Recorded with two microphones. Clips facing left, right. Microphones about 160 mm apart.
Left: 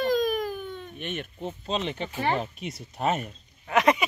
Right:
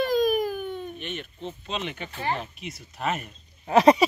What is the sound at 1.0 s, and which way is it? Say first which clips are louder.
Speech: left 1 dB; 50° left (ahead or behind).